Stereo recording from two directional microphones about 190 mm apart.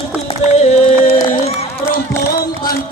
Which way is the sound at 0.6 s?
35° left (ahead or behind).